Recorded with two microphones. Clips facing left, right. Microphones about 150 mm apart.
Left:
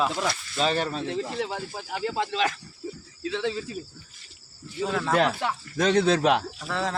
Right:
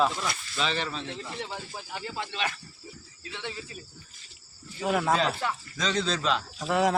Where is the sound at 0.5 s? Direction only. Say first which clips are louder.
Left 5 dB; 45° left (ahead or behind).